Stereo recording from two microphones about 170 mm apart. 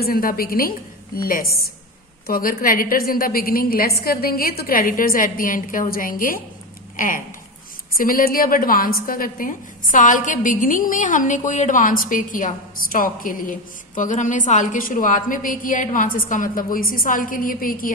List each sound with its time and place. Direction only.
0.0 s a woman's voice: 60° left (ahead or behind)